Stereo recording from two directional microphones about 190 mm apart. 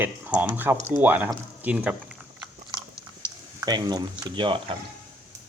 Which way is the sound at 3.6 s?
20° right (ahead or behind).